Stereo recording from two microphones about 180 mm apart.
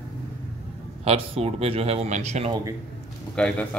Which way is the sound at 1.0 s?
35° right (ahead or behind).